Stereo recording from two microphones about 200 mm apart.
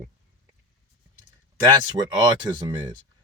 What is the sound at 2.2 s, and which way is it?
Speech, 20° right (ahead or behind).